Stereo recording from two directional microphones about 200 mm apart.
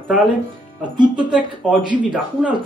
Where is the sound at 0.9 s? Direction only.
20° right (ahead or behind).